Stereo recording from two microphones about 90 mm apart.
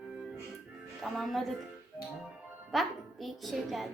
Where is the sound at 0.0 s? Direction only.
10° right (ahead or behind).